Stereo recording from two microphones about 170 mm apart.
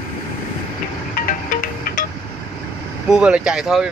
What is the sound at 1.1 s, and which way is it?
Music, 55° left (ahead or behind).